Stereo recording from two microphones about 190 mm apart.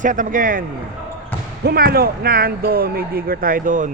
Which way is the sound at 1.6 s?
55° right (ahead or behind).